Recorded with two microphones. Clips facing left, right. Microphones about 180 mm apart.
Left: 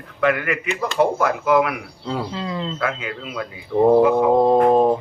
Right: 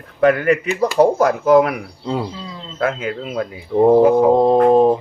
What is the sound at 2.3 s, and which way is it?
Speech, 75° left (ahead or behind).